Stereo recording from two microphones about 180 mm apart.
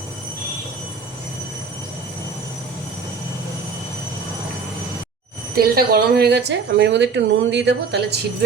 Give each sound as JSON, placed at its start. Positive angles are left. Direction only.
{"t": 5.5, "sound": "speech", "side_deg": -60}